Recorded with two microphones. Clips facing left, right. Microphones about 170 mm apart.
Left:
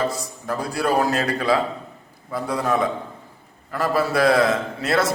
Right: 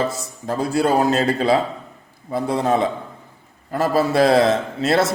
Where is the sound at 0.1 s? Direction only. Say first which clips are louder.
Right 1 dB; 25° right (ahead or behind).